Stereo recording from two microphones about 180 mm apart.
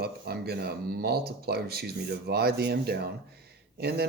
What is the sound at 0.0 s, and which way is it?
Speech, 60° right (ahead or behind).